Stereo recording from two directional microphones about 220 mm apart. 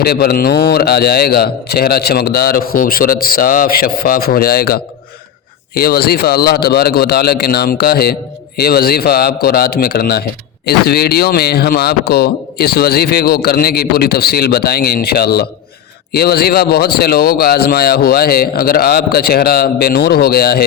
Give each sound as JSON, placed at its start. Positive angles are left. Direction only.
{"t": 0.0, "sound": "speech", "side_deg": 45}